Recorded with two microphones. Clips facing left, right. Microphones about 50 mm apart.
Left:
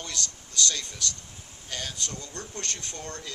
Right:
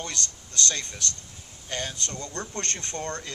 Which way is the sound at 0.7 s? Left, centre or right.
Right.